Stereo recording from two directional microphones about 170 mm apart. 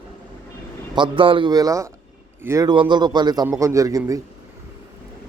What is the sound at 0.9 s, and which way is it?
Speech, 30° right (ahead or behind).